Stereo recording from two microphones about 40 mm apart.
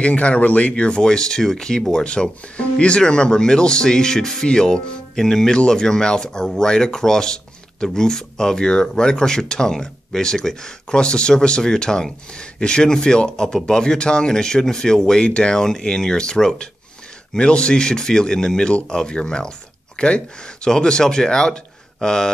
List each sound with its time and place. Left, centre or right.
0.0 s speech: left; by 22.3 s centre